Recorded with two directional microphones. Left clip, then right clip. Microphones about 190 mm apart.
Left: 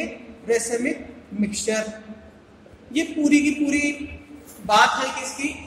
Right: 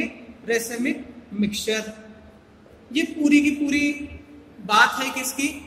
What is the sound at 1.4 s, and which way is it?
Speech, 30° right (ahead or behind).